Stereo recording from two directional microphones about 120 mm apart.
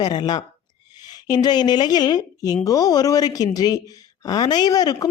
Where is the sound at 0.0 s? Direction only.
35° left (ahead or behind).